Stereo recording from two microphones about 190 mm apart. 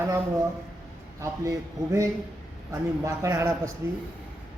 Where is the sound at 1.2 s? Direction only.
15° right (ahead or behind).